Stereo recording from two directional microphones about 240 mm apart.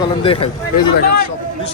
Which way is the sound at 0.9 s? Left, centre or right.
Left.